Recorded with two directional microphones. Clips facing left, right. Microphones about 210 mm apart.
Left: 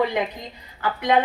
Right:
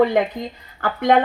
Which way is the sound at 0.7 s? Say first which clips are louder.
Right 4 dB; 50° right (ahead or behind).